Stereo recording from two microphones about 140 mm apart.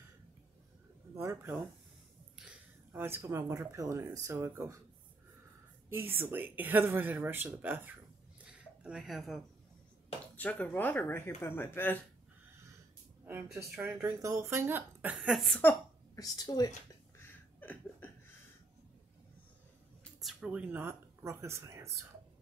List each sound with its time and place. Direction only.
1.1 s speech: 20° right (ahead or behind)
2.9 s speech: 15° right (ahead or behind)
5.9 s speech: 15° right (ahead or behind)
8.5 s a sound: 5° right (ahead or behind)
10.3 s speech: 10° left (ahead or behind)
13.2 s speech: 15° right (ahead or behind)
13.5 s a woman's voice: centre (ahead or behind)
14.0 s speech: 20° right (ahead or behind); by 15.6 s centre (ahead or behind)
16.2 s a woman's voice: 25° left (ahead or behind)
17.6 s a sound: 15° left (ahead or behind)
20.2 s speech: 5° right (ahead or behind); by 21.9 s 20° right (ahead or behind)